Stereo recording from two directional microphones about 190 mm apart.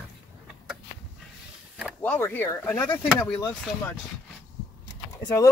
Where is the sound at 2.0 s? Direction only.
10° left (ahead or behind).